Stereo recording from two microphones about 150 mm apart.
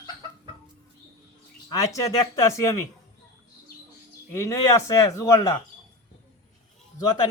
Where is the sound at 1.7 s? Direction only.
20° left (ahead or behind).